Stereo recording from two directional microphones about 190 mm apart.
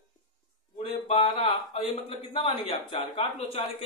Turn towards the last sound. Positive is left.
turn(degrees=30)  # may be behind; listen again after turning